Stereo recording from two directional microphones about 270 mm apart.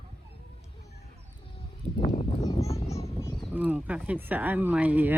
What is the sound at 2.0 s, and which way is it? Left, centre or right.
Speech, left.